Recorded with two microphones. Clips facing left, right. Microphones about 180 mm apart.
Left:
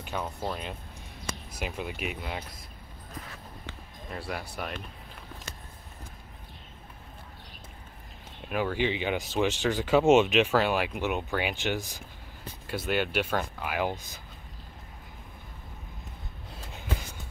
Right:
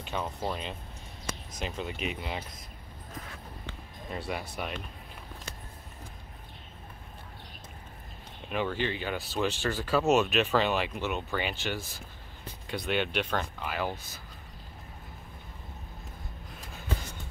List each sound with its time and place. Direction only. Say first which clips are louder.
0.0 s speech: even; 5° left (ahead or behind)
4.1 s speech: right 1 dB; centre (ahead or behind)
8.5 s speech: left 3 dB; 5° left (ahead or behind); by 10.2 s 25° left (ahead or behind)
10.2 s speech: left 2 dB; 10° left (ahead or behind)
12.6 s speech: left 1 dB; 5° left (ahead or behind)